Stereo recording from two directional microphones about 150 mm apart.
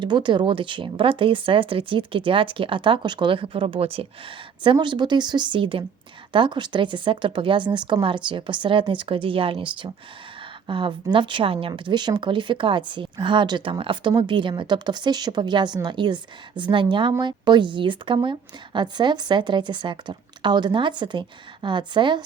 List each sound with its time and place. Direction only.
0.0 s a woman's voice: 30° right (ahead or behind)